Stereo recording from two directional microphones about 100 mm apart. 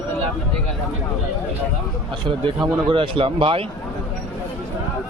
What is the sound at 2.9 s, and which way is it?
Speech, 60° right (ahead or behind).